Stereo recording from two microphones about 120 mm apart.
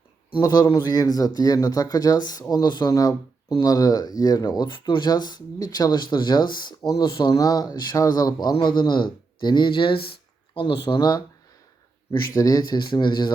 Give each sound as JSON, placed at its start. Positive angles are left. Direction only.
{"t": 0.4, "sound": "speech", "side_deg": 35}
{"t": 12.3, "sound": "speech", "side_deg": 30}